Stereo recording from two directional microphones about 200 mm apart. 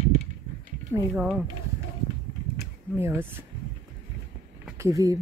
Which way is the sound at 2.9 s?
10° right (ahead or behind).